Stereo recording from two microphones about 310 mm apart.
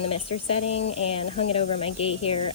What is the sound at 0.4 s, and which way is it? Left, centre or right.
Speech, centre.